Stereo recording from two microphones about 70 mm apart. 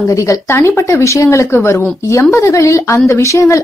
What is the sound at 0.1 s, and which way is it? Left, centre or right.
Speech, left.